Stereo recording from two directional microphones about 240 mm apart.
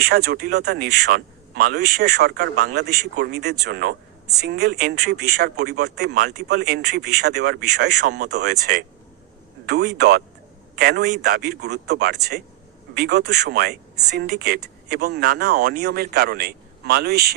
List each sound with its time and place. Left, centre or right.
0.0 s speech: right